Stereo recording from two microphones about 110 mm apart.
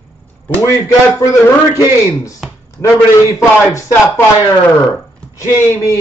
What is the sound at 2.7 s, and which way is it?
A man's voice, 30° left (ahead or behind).